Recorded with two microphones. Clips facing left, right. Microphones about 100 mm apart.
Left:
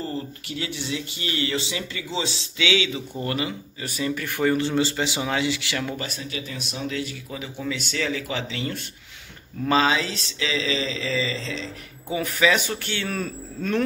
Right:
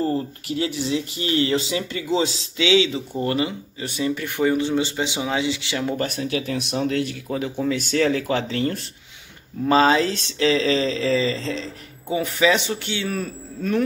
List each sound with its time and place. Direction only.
0.0 s speech: 35° right (ahead or behind)
6.0 s speech: 65° right (ahead or behind)
7.2 s speech: 45° right (ahead or behind)
12.1 s speech: 25° right (ahead or behind); by 13.8 s 10° right (ahead or behind)